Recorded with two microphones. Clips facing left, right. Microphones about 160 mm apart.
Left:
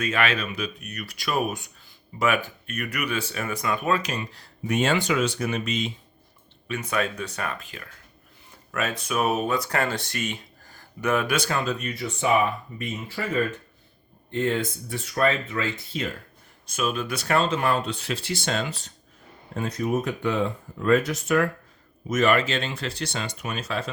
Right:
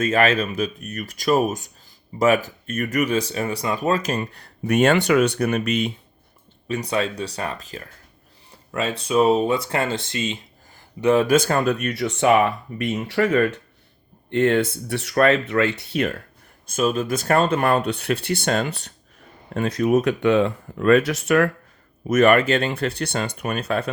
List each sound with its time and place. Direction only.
0.0 s speech: 40° right (ahead or behind); by 5.9 s 60° right (ahead or behind)
6.7 s speech: 35° right (ahead or behind)
11.3 s speech: 45° right (ahead or behind); by 16.2 s 65° right (ahead or behind)
16.6 s speech: 40° right (ahead or behind); by 18.9 s 60° right (ahead or behind)
19.5 s speech: 80° right
22.1 s speech: 60° right (ahead or behind)